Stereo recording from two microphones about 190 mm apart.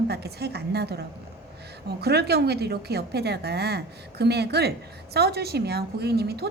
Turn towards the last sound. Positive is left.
turn(degrees=-60)  # may be behind; listen again after turning